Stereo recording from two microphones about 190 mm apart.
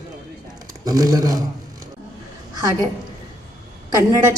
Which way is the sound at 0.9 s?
20° right (ahead or behind).